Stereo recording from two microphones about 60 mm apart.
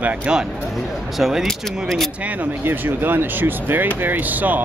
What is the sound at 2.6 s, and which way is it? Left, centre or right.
Speech, right.